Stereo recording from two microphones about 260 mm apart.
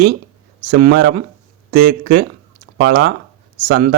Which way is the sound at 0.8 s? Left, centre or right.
Right.